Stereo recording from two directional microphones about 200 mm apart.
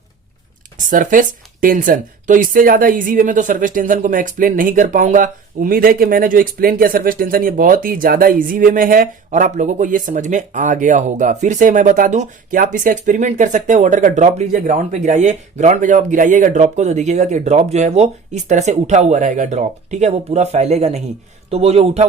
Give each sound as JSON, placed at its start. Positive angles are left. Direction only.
{"t": 0.8, "sound": "speech", "side_deg": -40}